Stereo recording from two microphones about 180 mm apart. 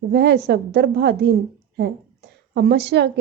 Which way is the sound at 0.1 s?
70° right (ahead or behind).